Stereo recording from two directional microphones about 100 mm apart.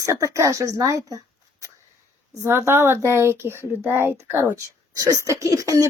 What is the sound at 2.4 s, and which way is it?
A woman's voice, 25° right (ahead or behind).